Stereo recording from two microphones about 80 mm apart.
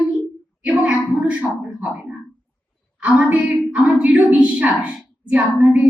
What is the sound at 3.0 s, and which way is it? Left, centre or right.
Speech, centre.